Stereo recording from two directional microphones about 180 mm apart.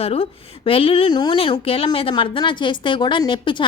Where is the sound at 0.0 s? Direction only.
35° left (ahead or behind).